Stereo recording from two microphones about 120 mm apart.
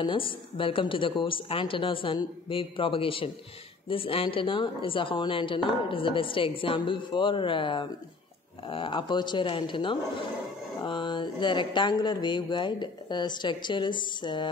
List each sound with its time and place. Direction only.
0.0 s a woman's voice: 45° left (ahead or behind)